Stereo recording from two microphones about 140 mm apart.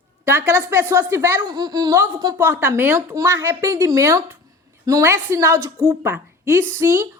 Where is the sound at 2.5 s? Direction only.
20° right (ahead or behind).